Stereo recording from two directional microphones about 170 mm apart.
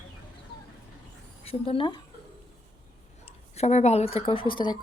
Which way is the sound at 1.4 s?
35° left (ahead or behind).